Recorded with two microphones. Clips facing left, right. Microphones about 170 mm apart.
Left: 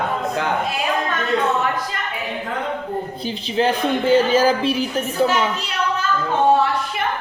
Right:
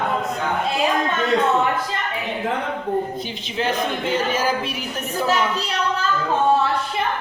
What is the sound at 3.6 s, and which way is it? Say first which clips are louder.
Speech: left 4 dB; 30° left (ahead or behind).